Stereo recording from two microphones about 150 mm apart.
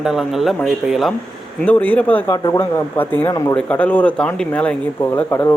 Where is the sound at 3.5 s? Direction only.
10° left (ahead or behind).